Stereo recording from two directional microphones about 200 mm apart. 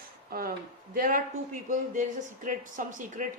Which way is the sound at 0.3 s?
50° right (ahead or behind).